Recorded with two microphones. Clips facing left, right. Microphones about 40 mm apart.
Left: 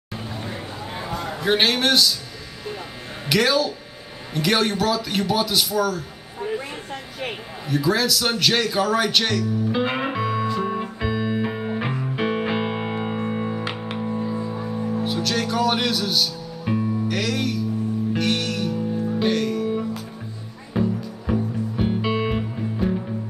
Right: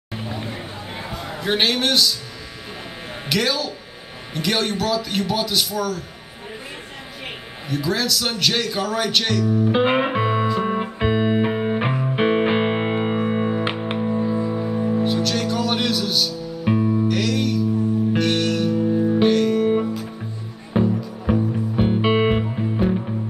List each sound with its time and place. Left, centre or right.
1.4 s a man's voice: centre
3.3 s a man's voice: centre
7.6 s a man's voice: centre
9.7 s music: right
13.9 s music: centre
15.0 s music: centre
16.6 s music: centre
17.1 s music: centre
18.9 s music: centre
19.2 s music: centre
20.7 s music: right